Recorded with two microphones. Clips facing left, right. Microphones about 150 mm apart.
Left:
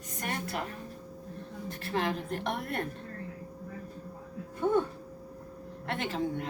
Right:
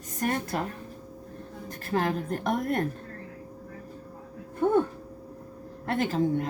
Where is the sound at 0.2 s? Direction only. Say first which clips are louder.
Right 8 dB; 40° right (ahead or behind).